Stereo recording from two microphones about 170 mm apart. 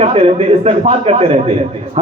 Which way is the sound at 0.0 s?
35° right (ahead or behind).